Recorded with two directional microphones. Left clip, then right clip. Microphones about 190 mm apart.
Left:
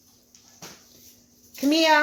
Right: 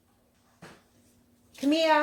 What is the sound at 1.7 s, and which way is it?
Speech, 40° left (ahead or behind).